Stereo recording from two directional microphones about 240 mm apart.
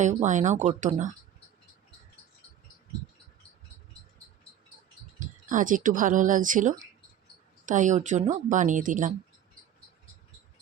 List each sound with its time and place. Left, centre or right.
0.0 s speech: right
5.2 s speech: right